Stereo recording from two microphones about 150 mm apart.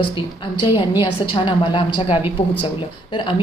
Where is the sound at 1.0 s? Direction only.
30° left (ahead or behind).